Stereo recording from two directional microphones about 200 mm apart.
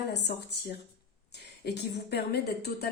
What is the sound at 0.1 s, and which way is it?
Speech, 60° left (ahead or behind).